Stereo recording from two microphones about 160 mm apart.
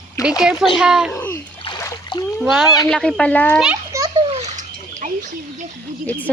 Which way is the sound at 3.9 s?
25° right (ahead or behind).